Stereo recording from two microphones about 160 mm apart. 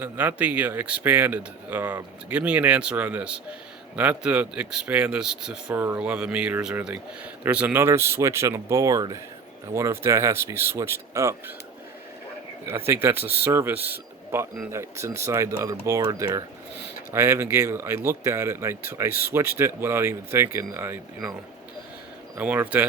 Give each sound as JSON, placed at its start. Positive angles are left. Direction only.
{"t": 0.0, "sound": "speech", "side_deg": -10}
{"t": 12.6, "sound": "speech", "side_deg": -15}
{"t": 22.4, "sound": "speech", "side_deg": -10}